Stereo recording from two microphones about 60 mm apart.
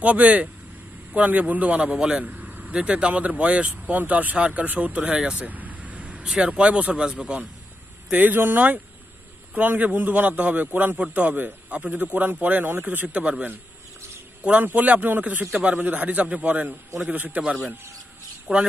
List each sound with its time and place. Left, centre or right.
0.0 s a man's voice: right
2.2 s vehicle: right
2.7 s a man's voice: centre
5.5 s speech: right
8.1 s a man's voice: right
18.5 s speech: right